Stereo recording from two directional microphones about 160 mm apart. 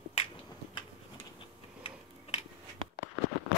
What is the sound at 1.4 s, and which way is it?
Tick-tock, 35° left (ahead or behind).